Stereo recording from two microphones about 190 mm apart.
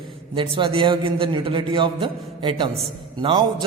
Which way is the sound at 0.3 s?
25° right (ahead or behind).